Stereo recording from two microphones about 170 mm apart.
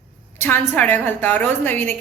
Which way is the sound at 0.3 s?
10° left (ahead or behind).